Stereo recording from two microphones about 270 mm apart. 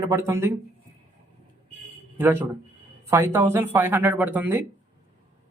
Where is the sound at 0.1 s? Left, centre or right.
Centre.